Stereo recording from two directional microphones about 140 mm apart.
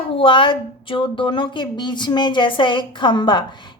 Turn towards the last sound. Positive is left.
turn(degrees=35)  # may be behind; listen again after turning